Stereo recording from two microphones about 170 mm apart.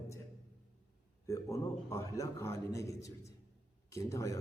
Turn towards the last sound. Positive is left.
turn(degrees=15)  # may be behind; listen again after turning